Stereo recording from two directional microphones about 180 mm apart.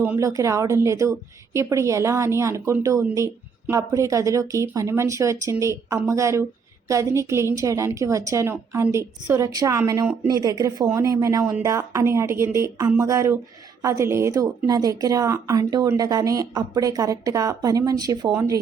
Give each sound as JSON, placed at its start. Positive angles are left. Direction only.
{"t": 0.0, "sound": "a woman's voice", "side_deg": -15}